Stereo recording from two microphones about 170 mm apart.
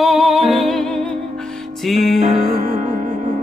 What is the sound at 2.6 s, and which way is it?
Music, 45° right (ahead or behind).